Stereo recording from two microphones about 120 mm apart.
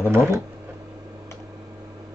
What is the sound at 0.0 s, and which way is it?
Speech, 20° right (ahead or behind).